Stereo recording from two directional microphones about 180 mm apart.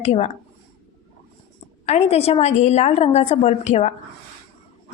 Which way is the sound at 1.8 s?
35° left (ahead or behind).